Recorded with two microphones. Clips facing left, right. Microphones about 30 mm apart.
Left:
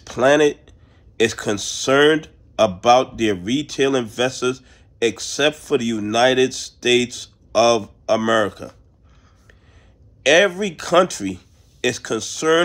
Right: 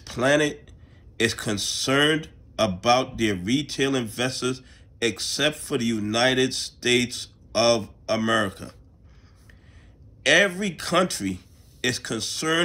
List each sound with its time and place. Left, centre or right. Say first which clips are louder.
0.0 s a man's voice: left 7 dB; right
2.1 s a sound: left 6 dB; right
2.8 s a man's voice: left 6 dB; right
8.6 s speech: left 6 dB; right
10.2 s a man's voice: left 5 dB; right